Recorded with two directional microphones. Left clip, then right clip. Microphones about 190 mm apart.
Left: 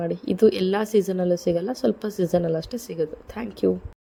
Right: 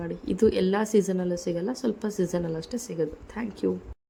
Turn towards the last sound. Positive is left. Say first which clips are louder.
# left 5 dB
turn(degrees=25)  # may be behind; listen again after turning